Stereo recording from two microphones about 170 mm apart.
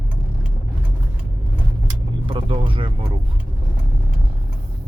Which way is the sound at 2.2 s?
30° right (ahead or behind).